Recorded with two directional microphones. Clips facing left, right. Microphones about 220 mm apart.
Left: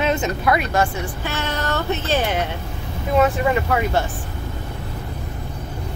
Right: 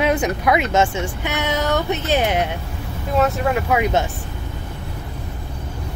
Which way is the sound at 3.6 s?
15° right (ahead or behind).